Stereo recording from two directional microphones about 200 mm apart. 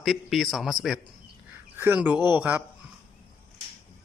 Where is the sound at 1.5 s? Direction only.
10° right (ahead or behind).